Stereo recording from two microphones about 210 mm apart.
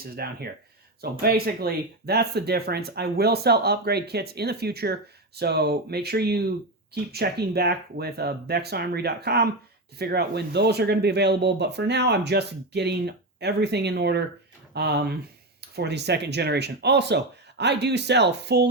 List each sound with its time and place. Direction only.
0.0 s speech: 50° right (ahead or behind)